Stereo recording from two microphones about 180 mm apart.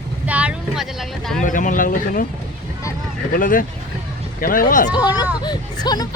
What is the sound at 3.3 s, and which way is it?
Speech, 50° left (ahead or behind).